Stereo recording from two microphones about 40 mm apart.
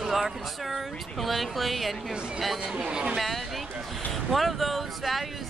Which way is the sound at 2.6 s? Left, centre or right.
Right.